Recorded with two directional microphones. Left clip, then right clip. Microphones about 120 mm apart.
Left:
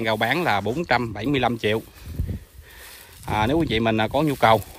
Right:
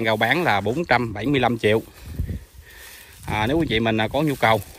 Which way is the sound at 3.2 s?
40° left (ahead or behind).